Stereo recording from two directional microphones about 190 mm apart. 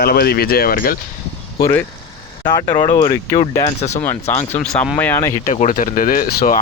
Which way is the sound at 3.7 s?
35° left (ahead or behind).